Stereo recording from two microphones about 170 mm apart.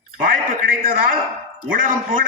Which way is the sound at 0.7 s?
55° right (ahead or behind).